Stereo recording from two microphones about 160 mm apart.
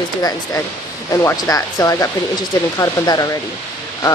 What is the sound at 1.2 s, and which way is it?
Speech, 20° left (ahead or behind).